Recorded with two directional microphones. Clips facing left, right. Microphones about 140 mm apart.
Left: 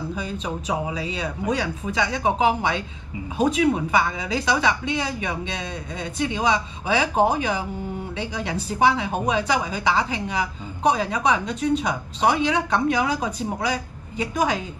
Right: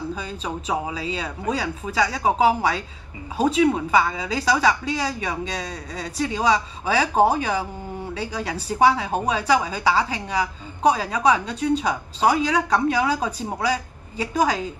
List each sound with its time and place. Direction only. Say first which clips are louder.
0.2 s a woman's voice: left 1 dB; 30° right (ahead or behind)